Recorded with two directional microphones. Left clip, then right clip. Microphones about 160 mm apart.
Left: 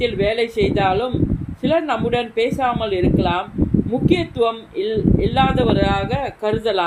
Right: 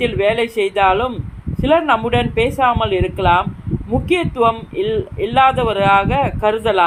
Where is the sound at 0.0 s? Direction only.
20° right (ahead or behind).